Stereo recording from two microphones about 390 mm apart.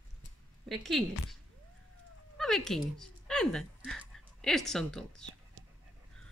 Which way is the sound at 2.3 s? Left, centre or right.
Centre.